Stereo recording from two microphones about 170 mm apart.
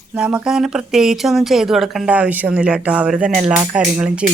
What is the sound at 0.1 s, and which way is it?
Speech, 10° right (ahead or behind).